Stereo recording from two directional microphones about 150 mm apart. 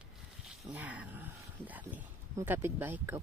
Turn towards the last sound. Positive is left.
turn(degrees=-15)  # may be behind; listen again after turning